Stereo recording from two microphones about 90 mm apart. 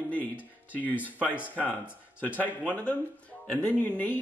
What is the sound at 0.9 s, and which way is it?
Speech, 15° right (ahead or behind).